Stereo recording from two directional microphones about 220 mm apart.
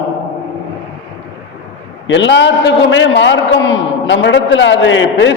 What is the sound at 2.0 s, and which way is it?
A man's voice, 55° left (ahead or behind).